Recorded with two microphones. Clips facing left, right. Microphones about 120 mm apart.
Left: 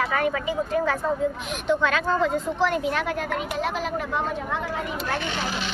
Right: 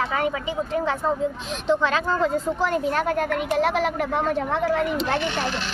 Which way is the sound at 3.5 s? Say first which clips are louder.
Right 8 dB; 65° right (ahead or behind).